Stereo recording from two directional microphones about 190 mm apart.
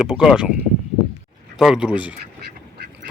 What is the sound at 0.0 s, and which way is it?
Speech, 5° right (ahead or behind).